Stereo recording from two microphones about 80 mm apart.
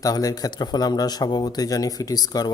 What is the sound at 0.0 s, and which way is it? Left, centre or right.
Speech, left.